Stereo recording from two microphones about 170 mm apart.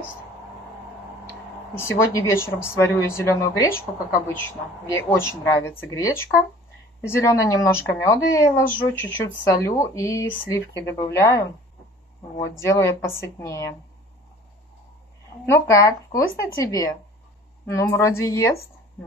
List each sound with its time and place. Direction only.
1.8 s speech: 15° left (ahead or behind)
4.8 s speech: 15° left (ahead or behind)
12.5 s speech: 15° left (ahead or behind)
15.7 s speech: 20° left (ahead or behind)